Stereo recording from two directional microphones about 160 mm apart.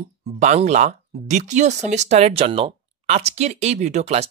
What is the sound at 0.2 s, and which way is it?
Speech, 45° right (ahead or behind).